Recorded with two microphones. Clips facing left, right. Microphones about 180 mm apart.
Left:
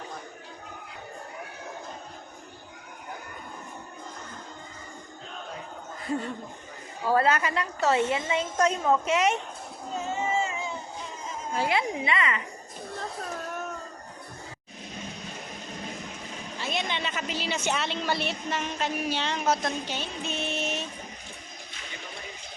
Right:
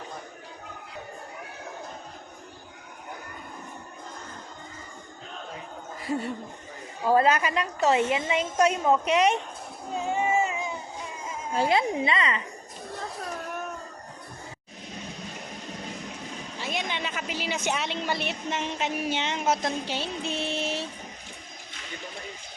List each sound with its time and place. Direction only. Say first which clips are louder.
7.1 s a woman's voice: right 2 dB; 15° right (ahead or behind)
10.1 s a sound: right 4 dB; 15° right (ahead or behind)
11.5 s a woman's voice: right 3 dB; 30° right (ahead or behind)
16.6 s a woman's voice: left 1 dB; 15° right (ahead or behind); by 20.8 s 30° right (ahead or behind)